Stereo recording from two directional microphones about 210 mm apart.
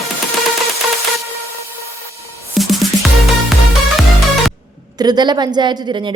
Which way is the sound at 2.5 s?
Centre (ahead or behind).